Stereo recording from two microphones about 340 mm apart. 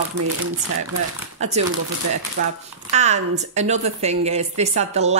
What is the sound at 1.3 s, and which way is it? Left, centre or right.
Speech, centre.